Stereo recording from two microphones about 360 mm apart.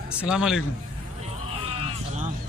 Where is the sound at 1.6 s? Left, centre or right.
Centre.